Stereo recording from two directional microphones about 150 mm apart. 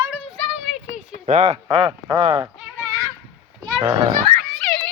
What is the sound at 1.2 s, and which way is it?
Speech, 50° right (ahead or behind).